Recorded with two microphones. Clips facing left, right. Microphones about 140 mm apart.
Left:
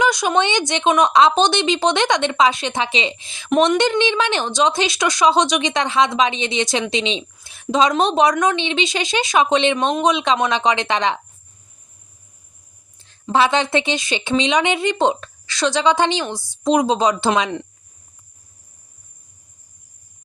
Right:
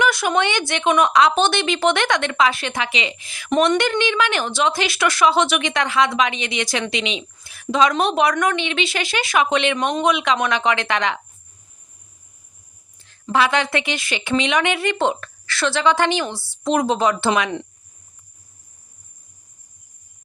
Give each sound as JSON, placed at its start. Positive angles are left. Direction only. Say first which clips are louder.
{"t": 0.0, "sound": "a woman's voice", "louder": "left 1 dB", "side_deg": 15}
{"t": 3.5, "sound": "speech", "louder": "left 1 dB", "side_deg": 5}
{"t": 3.8, "sound": "a woman's voice", "louder": "left 2 dB", "side_deg": 20}
{"t": 13.3, "sound": "a woman's voice", "louder": "left 2 dB", "side_deg": 25}